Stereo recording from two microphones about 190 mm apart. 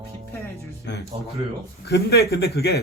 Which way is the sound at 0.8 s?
65° left (ahead or behind).